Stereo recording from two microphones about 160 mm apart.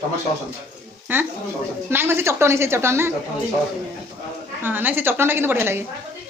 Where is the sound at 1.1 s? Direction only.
15° right (ahead or behind).